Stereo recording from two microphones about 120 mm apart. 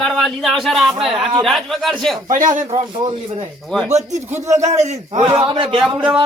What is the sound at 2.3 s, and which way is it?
Speech, 90° right.